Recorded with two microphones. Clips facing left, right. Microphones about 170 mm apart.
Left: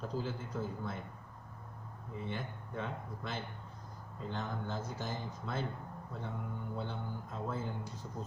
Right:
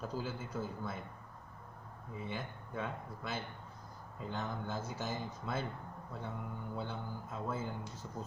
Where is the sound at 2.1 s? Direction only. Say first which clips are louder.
Left 1 dB; 5° right (ahead or behind).